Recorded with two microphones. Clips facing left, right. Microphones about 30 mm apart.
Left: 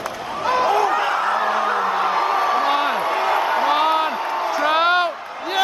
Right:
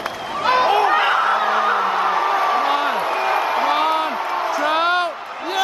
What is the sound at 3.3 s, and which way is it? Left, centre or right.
Music, centre.